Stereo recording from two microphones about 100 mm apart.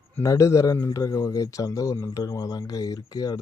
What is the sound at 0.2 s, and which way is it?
Speech, 35° left (ahead or behind).